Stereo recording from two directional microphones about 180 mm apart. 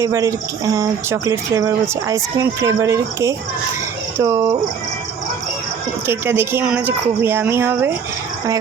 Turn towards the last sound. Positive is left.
turn(degrees=-10)  # may be behind; listen again after turning